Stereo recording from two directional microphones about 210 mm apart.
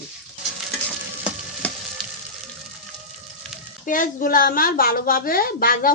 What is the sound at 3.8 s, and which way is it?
A woman's voice, 40° left (ahead or behind).